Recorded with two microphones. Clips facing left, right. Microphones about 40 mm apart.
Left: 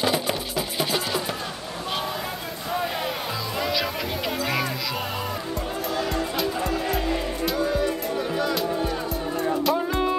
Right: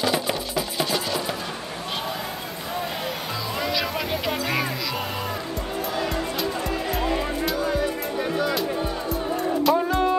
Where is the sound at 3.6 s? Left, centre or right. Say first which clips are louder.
Even; centre.